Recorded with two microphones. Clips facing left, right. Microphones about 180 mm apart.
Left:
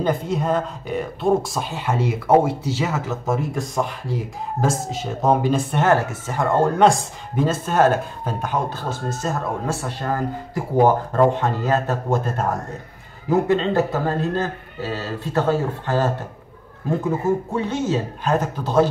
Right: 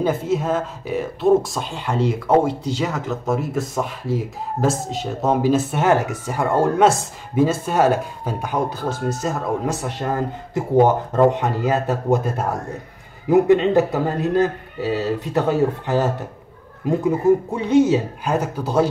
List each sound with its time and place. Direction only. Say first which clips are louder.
0.0 s speech: right 2 dB; 5° right (ahead or behind)
5.9 s a man's voice: right 1 dB; 15° right (ahead or behind)
17.6 s speech: right 11 dB; 15° right (ahead or behind)